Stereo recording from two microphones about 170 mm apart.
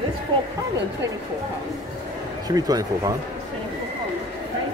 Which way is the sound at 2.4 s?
20° right (ahead or behind).